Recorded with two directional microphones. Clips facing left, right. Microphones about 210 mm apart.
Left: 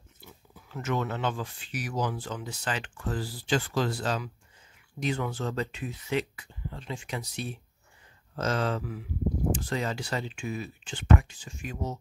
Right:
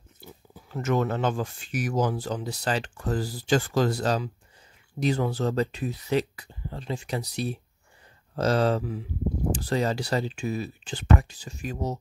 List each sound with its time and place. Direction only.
0.2 s speech: 35° right (ahead or behind)